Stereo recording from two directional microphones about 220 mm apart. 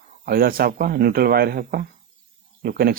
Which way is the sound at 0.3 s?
40° right (ahead or behind).